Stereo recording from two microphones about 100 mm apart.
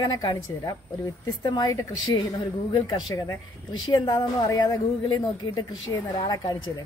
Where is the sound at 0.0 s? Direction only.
45° left (ahead or behind).